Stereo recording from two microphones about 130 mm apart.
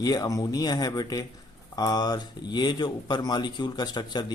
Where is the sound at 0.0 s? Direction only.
30° left (ahead or behind).